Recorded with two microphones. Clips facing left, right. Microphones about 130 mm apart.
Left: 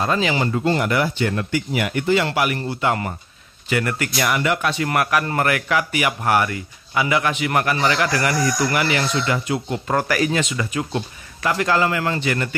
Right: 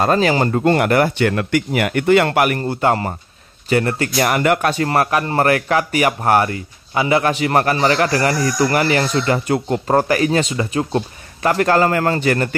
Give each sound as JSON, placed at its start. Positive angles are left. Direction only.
{"t": 0.0, "sound": "speech", "side_deg": -45}
{"t": 0.7, "sound": "speech", "side_deg": -55}
{"t": 4.3, "sound": "speech", "side_deg": -50}
{"t": 4.8, "sound": "speech", "side_deg": -30}